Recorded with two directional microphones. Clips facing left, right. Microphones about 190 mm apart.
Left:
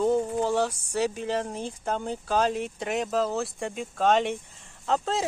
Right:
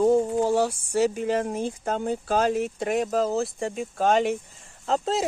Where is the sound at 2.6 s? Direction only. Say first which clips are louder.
Right 4 dB; centre (ahead or behind).